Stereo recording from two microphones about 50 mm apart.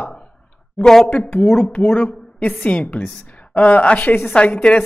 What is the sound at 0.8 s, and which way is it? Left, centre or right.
Speech, centre.